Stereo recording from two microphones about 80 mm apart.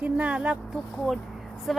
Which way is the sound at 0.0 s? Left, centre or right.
Centre.